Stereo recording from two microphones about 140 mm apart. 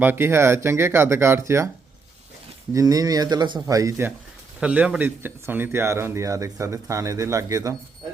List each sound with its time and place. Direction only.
0.0 s speech: 15° right (ahead or behind)
2.7 s speech: 25° right (ahead or behind)
4.6 s speech: 10° right (ahead or behind)